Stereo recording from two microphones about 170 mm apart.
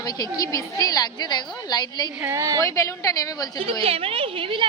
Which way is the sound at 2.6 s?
20° left (ahead or behind).